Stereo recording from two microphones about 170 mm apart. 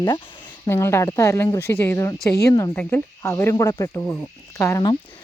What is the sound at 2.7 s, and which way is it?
Cricket, 15° left (ahead or behind).